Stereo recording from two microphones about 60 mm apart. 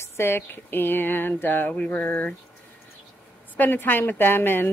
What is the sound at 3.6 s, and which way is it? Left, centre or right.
Speech, left.